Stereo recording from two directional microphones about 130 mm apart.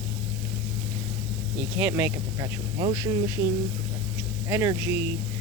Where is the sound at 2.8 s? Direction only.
30° right (ahead or behind).